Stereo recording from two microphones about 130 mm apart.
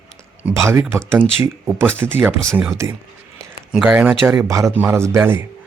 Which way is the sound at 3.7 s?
10° right (ahead or behind).